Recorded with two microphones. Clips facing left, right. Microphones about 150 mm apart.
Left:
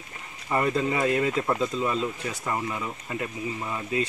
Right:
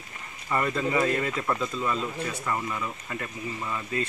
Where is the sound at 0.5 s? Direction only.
20° left (ahead or behind).